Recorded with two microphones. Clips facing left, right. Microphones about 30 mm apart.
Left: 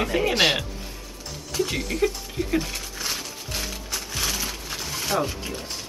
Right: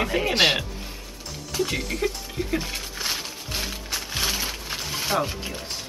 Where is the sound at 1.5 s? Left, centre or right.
Centre.